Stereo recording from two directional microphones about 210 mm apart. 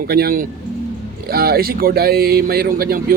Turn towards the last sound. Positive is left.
turn(degrees=-45)  # may be behind; listen again after turning